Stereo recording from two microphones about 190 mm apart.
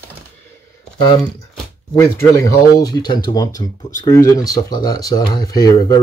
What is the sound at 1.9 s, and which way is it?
Speech, 15° left (ahead or behind).